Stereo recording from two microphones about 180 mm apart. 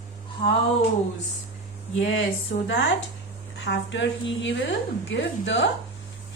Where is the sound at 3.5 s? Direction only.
90° left.